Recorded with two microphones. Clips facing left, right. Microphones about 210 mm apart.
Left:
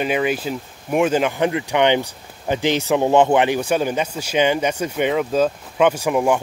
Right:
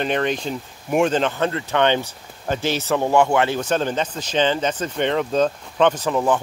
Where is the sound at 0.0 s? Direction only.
5° left (ahead or behind).